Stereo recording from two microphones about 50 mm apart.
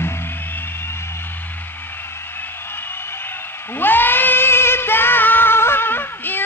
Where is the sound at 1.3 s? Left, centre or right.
Left.